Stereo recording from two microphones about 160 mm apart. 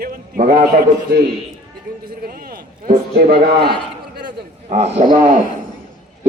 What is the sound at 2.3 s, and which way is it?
A man's voice, 65° right (ahead or behind).